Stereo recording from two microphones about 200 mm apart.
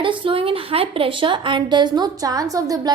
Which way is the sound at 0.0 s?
25° right (ahead or behind).